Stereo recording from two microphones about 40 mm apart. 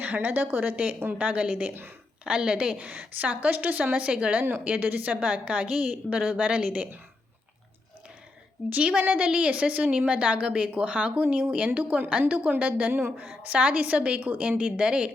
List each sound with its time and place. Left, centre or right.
0.0 s a woman's voice: right
1.2 s a woman's voice: right
2.2 s speech: right
2.7 s a woman's voice: right
3.9 s a woman's voice: right
4.4 s a woman's voice: right
5.2 s a woman's voice: right
8.8 s a woman's voice: right
12.9 s a woman's voice: right
13.1 s a woman's voice: right
13.5 s a woman's voice: right
14.6 s speech: right